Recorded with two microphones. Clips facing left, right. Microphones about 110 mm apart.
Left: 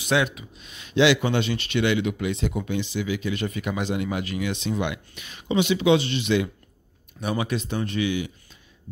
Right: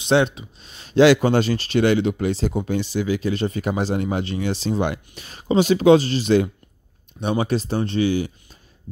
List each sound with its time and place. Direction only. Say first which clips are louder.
0.0 s speech: right 5 dB; 30° right (ahead or behind)